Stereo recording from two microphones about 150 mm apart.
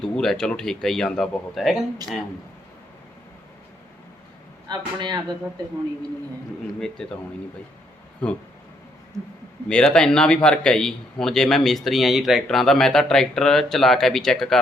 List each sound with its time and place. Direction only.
0.0 s a man's voice: 5° left (ahead or behind)
4.7 s a man's voice: 30° right (ahead or behind)
6.7 s a man's voice: 5° left (ahead or behind)
8.2 s speech: 10° left (ahead or behind)
9.6 s a man's voice: 5° left (ahead or behind)